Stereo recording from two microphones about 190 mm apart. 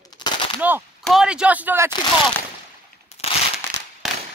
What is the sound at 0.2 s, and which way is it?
Machine gun, 25° left (ahead or behind).